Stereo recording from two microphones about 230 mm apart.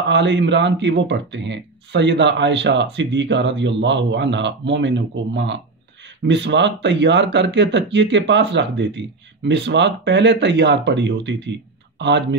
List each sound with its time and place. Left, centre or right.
0.1 s speech: right